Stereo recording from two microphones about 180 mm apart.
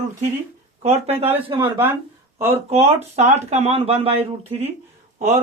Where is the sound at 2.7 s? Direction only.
35° right (ahead or behind).